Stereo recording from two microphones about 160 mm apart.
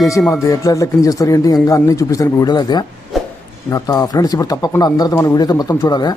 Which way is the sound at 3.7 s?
20° left (ahead or behind).